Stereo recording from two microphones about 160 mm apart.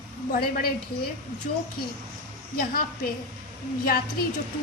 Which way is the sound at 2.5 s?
70° left (ahead or behind).